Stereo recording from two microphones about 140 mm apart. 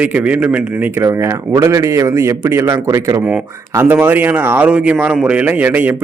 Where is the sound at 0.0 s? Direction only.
10° right (ahead or behind).